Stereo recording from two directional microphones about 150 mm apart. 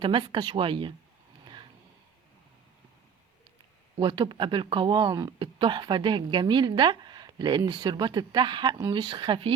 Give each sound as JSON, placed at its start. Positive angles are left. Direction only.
{"t": 0.0, "sound": "a woman's voice", "side_deg": -35}
{"t": 4.0, "sound": "a woman's voice", "side_deg": -30}